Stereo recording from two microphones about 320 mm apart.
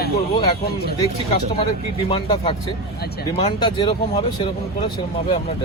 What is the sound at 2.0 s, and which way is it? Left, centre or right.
Speech, centre.